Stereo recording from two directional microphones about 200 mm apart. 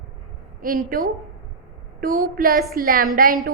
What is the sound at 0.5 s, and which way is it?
A woman's voice, 45° right (ahead or behind).